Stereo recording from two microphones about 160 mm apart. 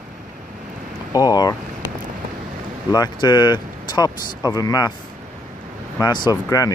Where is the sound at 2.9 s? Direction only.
25° left (ahead or behind).